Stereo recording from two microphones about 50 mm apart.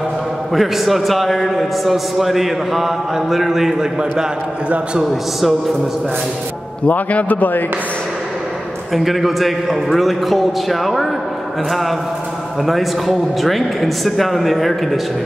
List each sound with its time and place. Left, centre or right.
0.5 s a man's voice: centre
6.9 s a man's voice: left
8.9 s a man's voice: centre
12.6 s a man's voice: centre